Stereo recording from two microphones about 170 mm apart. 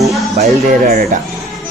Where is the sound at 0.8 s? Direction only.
55° right (ahead or behind).